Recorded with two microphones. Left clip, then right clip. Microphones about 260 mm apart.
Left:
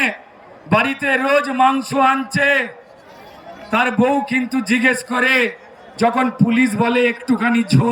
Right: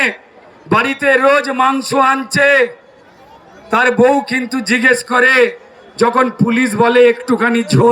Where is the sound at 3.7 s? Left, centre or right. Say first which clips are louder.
Right 6 dB; centre.